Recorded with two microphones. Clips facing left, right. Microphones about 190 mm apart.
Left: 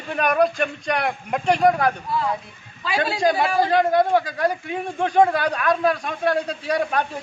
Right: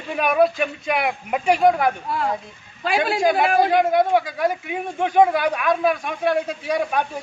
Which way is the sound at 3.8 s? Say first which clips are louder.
Even; 10° right (ahead or behind).